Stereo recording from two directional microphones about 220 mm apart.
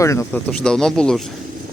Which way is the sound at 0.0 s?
15° left (ahead or behind).